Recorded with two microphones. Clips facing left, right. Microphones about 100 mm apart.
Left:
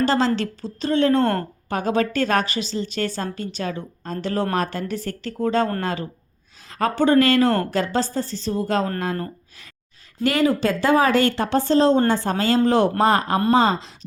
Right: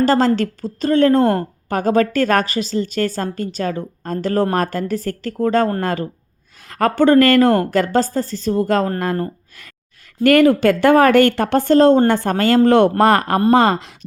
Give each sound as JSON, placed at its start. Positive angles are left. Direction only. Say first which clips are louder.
{"t": 0.0, "sound": "a woman's voice", "louder": "right 5 dB", "side_deg": -45}
{"t": 6.7, "sound": "a woman's voice", "louder": "right 5 dB", "side_deg": -60}
{"t": 10.2, "sound": "speech", "louder": "right 7 dB", "side_deg": -55}